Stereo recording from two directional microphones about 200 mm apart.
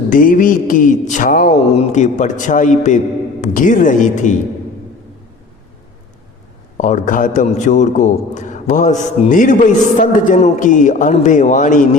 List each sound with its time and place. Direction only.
0.1 s a man's voice: 40° left (ahead or behind)
6.7 s a man's voice: 40° left (ahead or behind)